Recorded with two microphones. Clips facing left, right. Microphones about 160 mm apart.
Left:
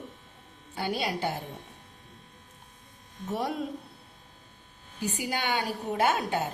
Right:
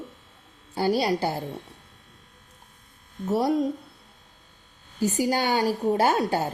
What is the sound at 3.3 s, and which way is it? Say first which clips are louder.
Speech: right 8 dB; 35° right (ahead or behind).